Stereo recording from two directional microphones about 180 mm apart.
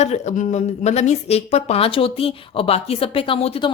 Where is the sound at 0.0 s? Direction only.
40° left (ahead or behind).